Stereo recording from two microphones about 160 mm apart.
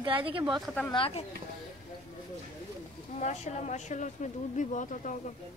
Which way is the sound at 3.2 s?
50° left (ahead or behind).